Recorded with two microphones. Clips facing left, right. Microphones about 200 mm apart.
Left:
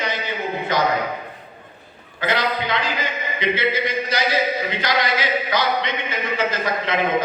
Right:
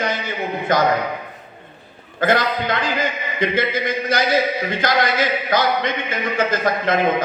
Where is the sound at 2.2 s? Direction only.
50° right (ahead or behind).